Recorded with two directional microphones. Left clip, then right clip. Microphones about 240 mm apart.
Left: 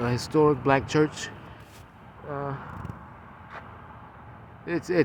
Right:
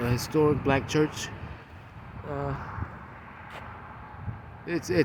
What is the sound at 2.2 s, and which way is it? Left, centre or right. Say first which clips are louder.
Vehicle: left 1 dB; centre.